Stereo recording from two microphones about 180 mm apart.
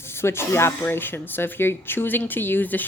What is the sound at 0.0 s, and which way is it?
Speech, 15° left (ahead or behind).